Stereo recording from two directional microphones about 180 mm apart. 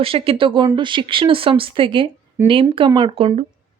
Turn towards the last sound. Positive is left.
turn(degrees=-30)  # may be behind; listen again after turning